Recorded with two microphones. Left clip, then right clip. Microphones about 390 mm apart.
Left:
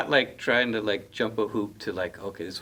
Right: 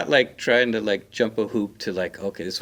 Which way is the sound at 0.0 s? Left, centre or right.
Right.